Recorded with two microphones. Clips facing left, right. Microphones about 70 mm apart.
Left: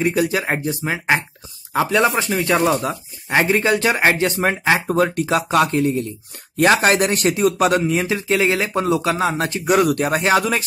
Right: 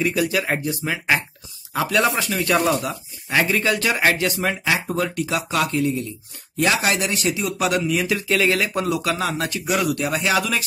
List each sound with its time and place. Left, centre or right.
0.0 s speech: left
9.8 s speech: left